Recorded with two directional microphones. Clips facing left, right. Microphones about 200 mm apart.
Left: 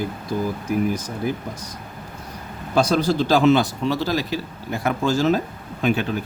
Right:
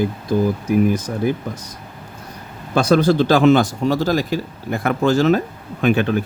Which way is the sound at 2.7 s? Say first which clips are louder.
Right 4 dB; 55° right (ahead or behind).